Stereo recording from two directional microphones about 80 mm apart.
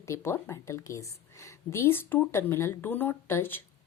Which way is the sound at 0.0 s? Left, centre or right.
Left.